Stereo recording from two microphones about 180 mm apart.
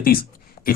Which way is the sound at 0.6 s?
55° left (ahead or behind).